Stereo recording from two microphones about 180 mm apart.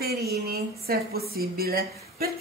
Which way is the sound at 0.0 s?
60° right (ahead or behind).